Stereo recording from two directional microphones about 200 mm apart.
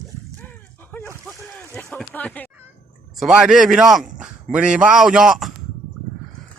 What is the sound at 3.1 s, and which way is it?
A man's voice, 5° right (ahead or behind).